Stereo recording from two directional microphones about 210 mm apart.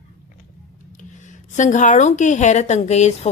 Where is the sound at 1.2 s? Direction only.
35° left (ahead or behind).